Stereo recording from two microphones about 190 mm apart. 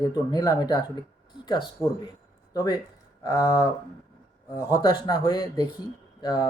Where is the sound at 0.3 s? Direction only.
20° left (ahead or behind).